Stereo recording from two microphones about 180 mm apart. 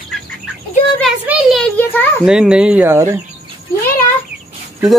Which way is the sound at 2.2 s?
5° right (ahead or behind).